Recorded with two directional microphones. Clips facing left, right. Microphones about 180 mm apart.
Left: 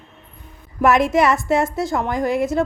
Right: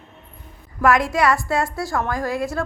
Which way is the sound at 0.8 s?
20° left (ahead or behind).